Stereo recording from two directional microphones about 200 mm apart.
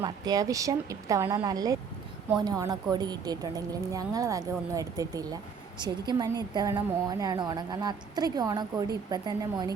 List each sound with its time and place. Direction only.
0.0 s a woman's voice: 20° right (ahead or behind)